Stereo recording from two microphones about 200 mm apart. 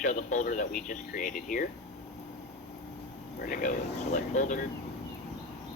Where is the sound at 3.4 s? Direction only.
45° left (ahead or behind).